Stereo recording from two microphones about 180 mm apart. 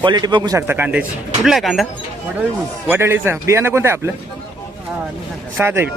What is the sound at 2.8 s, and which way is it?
A man's voice, 15° right (ahead or behind).